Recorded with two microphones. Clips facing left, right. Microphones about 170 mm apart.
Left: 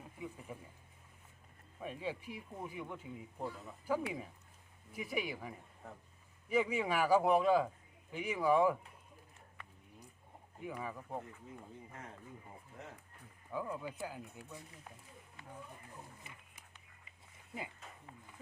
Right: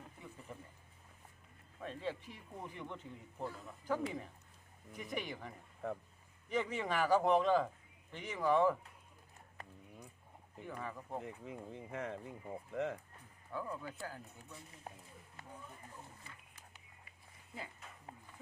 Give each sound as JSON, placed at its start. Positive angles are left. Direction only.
{"t": 0.0, "sound": "a sound", "side_deg": 10}
{"t": 1.8, "sound": "speech", "side_deg": 10}
{"t": 5.8, "sound": "speech", "side_deg": -90}
{"t": 6.5, "sound": "speech", "side_deg": 10}
{"t": 9.6, "sound": "a sound", "side_deg": -40}
{"t": 10.7, "sound": "speech", "side_deg": 10}
{"t": 11.4, "sound": "speech", "side_deg": -75}
{"t": 13.5, "sound": "speech", "side_deg": 15}
{"t": 14.9, "sound": "speech", "side_deg": -40}
{"t": 17.1, "sound": "dog", "side_deg": 20}